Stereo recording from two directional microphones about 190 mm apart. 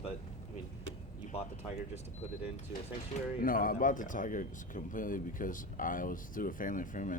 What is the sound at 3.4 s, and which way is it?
Speech, 45° left (ahead or behind).